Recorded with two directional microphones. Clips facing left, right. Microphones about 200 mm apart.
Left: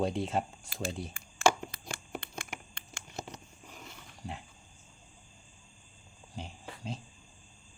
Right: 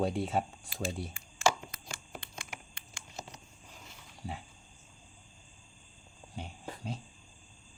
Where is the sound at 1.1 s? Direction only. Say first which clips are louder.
Left 4 dB; 55° left (ahead or behind).